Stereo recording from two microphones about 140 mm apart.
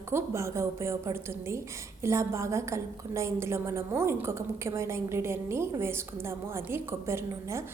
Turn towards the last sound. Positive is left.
turn(degrees=-20)  # may be behind; listen again after turning